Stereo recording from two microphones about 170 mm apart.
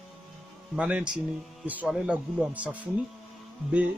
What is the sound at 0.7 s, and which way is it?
Speech, 5° right (ahead or behind).